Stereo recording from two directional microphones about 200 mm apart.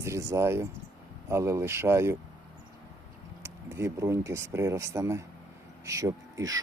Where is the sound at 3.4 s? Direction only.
15° right (ahead or behind).